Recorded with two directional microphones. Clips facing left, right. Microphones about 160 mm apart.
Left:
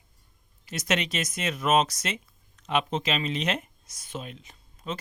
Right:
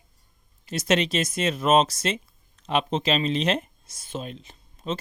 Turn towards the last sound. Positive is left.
turn(degrees=-30)  # may be behind; listen again after turning